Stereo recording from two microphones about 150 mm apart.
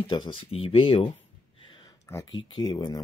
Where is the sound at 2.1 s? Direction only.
15° left (ahead or behind).